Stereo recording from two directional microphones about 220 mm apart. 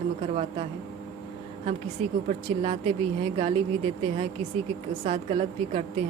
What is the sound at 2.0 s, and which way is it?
Speech, 25° right (ahead or behind).